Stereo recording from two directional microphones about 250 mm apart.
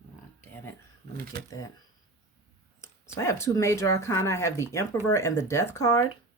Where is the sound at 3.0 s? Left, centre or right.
Centre.